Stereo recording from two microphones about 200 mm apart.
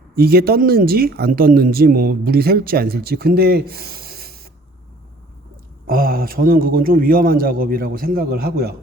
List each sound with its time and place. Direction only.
0.2 s speech: 50° right (ahead or behind)
5.9 s speech: 45° right (ahead or behind)